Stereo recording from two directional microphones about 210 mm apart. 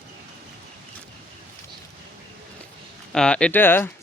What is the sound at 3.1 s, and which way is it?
Speech, 5° left (ahead or behind).